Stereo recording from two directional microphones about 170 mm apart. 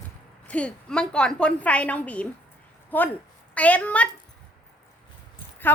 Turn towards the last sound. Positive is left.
turn(degrees=10)  # may be behind; listen again after turning